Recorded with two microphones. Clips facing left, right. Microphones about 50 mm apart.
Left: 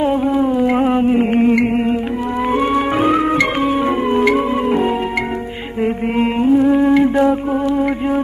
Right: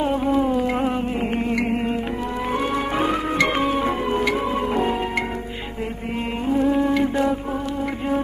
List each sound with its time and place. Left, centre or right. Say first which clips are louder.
0.3 s music: left 5 dB; centre
0.8 s music: left 9 dB; left
3.0 s music: left 5 dB; centre
4.1 s music: left 9 dB; left
6.5 s mantra: left 6 dB; centre
6.8 s mantra: left 8 dB; left